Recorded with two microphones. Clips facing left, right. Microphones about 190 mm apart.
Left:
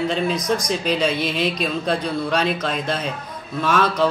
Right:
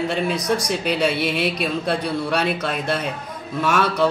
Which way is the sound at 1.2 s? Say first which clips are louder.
Even; 15° right (ahead or behind).